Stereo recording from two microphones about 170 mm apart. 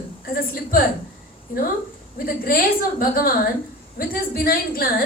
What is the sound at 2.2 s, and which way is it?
A woman's voice, 60° left (ahead or behind).